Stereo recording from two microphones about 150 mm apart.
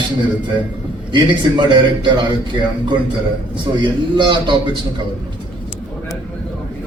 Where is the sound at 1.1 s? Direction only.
30° right (ahead or behind).